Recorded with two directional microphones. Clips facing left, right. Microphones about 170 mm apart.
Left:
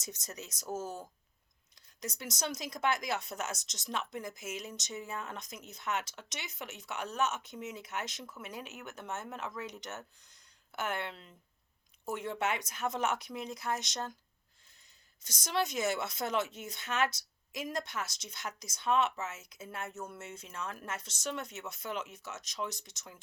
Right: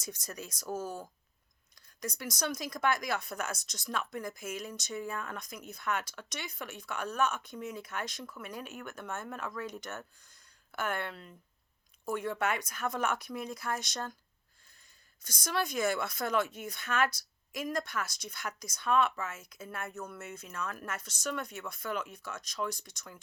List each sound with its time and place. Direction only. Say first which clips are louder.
0.0 s speech: right 2 dB; 20° left (ahead or behind)
15.2 s speech: even; 25° left (ahead or behind)